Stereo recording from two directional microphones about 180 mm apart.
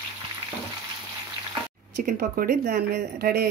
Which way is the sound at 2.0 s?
55° right (ahead or behind).